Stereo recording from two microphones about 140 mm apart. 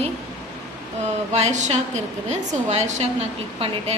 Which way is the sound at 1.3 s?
55° right (ahead or behind).